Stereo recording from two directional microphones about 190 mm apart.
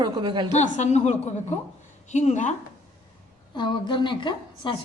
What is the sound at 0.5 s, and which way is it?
A woman's voice, 40° left (ahead or behind).